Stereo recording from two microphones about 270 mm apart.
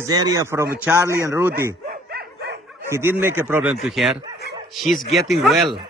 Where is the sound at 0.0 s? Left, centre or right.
Centre.